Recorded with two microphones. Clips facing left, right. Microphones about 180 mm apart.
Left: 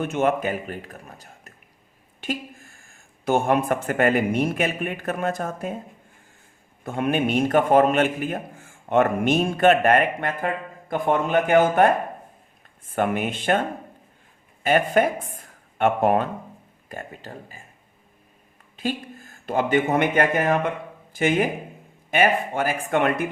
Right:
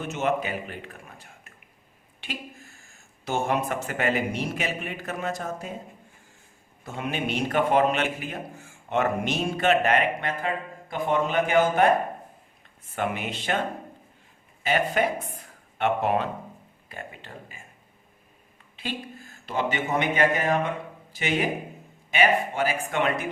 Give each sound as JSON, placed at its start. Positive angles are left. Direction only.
{"t": 0.0, "sound": "a man's voice", "side_deg": 55}
{"t": 6.8, "sound": "a man's voice", "side_deg": 55}
{"t": 13.0, "sound": "a man's voice", "side_deg": 50}
{"t": 14.6, "sound": "a man's voice", "side_deg": 50}
{"t": 15.4, "sound": "a sound", "side_deg": 50}
{"t": 16.9, "sound": "speech", "side_deg": 45}
{"t": 18.8, "sound": "a man's voice", "side_deg": 45}